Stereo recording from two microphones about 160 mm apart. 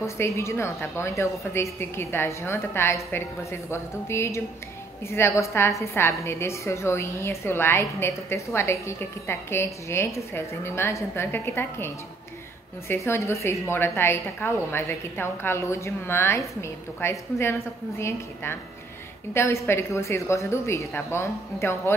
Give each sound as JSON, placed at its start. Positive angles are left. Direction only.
{"t": 0.0, "sound": "a woman's voice", "side_deg": 15}